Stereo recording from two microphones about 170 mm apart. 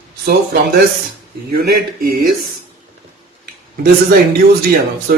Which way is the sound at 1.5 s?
60° right (ahead or behind).